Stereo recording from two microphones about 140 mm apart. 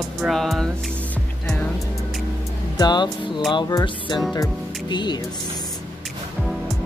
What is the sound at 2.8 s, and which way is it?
Speech, 30° left (ahead or behind).